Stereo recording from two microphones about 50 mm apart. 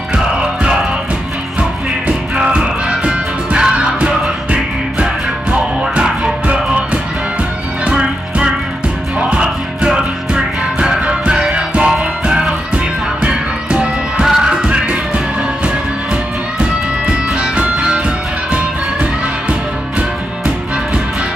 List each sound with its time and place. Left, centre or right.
0.1 s music: centre
17.1 s music: right